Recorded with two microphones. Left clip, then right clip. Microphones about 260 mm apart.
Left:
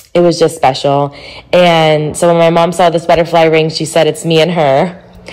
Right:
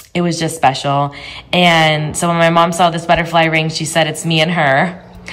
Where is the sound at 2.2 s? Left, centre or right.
Right.